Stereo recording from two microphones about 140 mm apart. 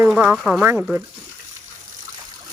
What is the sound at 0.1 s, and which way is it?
Speech, 5° right (ahead or behind).